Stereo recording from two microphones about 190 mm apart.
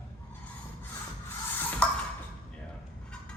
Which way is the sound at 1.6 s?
10° left (ahead or behind).